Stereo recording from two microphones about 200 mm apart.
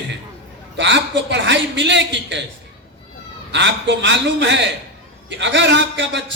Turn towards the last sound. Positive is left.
turn(degrees=-60)  # may be behind; listen again after turning